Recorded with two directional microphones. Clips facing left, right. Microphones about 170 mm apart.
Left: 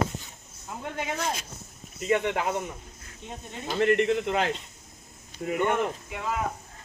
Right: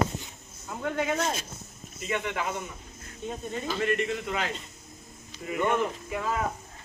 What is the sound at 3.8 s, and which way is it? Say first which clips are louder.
Speech: left 7 dB; 60° left (ahead or behind).